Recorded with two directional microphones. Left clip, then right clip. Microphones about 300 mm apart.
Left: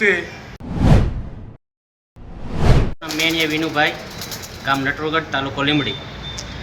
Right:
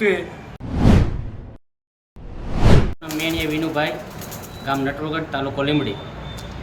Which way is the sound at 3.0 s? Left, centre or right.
Centre.